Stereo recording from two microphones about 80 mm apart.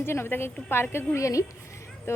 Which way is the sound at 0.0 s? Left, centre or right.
Left.